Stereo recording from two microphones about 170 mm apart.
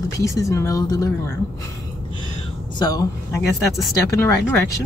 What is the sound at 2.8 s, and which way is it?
Speech, 20° left (ahead or behind).